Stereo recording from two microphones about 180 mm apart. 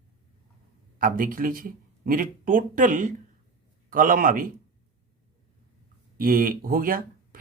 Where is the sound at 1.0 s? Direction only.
50° right (ahead or behind).